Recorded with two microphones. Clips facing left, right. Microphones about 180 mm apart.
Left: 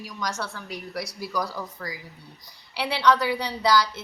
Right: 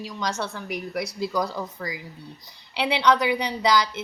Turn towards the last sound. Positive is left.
turn(degrees=-20)  # may be behind; listen again after turning